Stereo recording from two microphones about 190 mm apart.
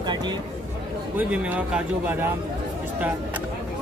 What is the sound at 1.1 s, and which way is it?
Speech, 5° right (ahead or behind).